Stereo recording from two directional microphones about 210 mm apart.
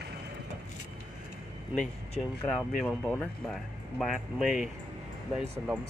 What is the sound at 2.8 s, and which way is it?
Speech, 5° left (ahead or behind).